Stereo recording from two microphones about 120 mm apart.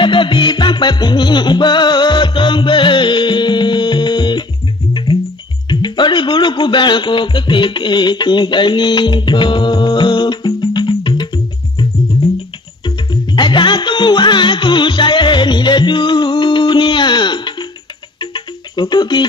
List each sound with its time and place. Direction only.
0.0 s music: 45° left (ahead or behind)
5.7 s a man's voice: 40° left (ahead or behind)
12.8 s music: 40° left (ahead or behind)